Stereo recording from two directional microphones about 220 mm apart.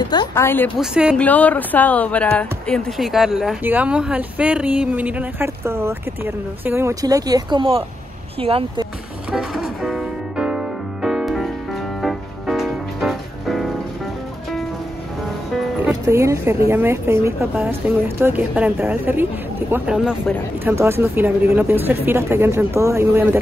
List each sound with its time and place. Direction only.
0.0 s a woman's voice: 20° left (ahead or behind)
0.7 s speech: 5° right (ahead or behind); by 8.8 s 25° right (ahead or behind)
9.3 s music: 5° right (ahead or behind)
15.9 s speech: 15° right (ahead or behind)